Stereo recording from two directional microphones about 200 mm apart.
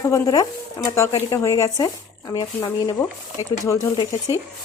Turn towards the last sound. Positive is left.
turn(degrees=15)  # may be behind; listen again after turning